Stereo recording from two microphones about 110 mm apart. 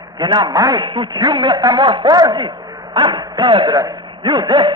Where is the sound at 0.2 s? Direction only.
45° right (ahead or behind).